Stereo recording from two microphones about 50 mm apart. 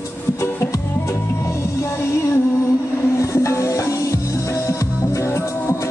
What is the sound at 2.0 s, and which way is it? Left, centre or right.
Music, left.